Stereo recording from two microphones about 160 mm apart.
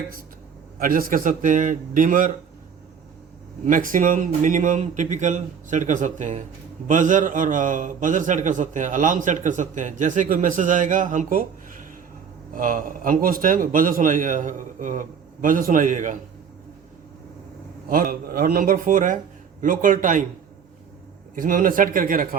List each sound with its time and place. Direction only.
0.8 s a man's voice: 60° right (ahead or behind)
3.7 s a man's voice: 55° right (ahead or behind)
12.5 s a man's voice: 60° right (ahead or behind)
17.8 s a man's voice: 60° right (ahead or behind)
21.3 s a man's voice: 60° right (ahead or behind)